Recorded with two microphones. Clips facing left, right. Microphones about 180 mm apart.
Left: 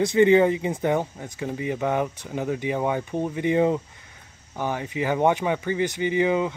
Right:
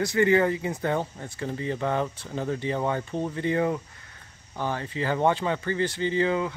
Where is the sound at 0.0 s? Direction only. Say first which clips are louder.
Left 4 dB; 20° left (ahead or behind).